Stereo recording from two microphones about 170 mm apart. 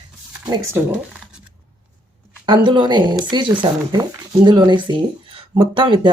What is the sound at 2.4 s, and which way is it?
Speech, 30° right (ahead or behind).